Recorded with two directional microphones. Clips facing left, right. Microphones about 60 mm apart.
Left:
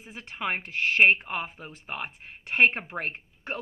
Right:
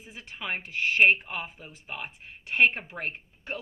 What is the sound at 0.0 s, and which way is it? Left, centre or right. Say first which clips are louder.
Speech: left 5 dB; left.